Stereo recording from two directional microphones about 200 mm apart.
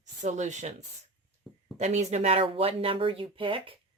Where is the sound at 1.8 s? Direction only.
35° right (ahead or behind).